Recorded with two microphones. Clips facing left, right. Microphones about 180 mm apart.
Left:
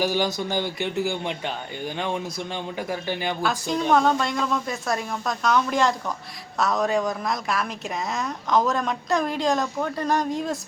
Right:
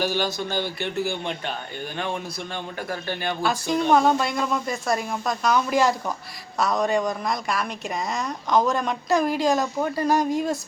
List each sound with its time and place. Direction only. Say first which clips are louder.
0.0 s speech: left 1 dB; 15° left (ahead or behind)
2.7 s speech: left 2 dB; 15° left (ahead or behind)
3.4 s speech: right 3 dB; centre (ahead or behind)